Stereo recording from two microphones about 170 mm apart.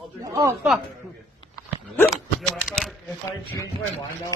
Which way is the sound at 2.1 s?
Centre (ahead or behind).